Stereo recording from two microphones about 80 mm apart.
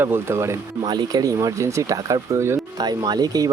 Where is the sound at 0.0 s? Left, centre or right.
Right.